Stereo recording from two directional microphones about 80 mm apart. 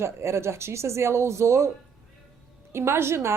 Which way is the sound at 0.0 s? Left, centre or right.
Right.